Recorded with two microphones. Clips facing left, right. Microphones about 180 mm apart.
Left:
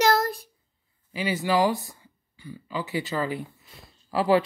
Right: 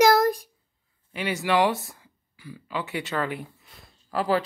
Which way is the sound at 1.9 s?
90° right.